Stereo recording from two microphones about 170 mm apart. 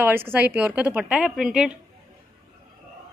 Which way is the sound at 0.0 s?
10° right (ahead or behind).